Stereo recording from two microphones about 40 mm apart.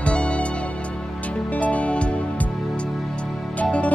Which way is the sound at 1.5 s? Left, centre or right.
Left.